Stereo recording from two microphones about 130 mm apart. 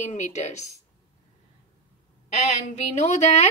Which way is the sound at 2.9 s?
60° left (ahead or behind).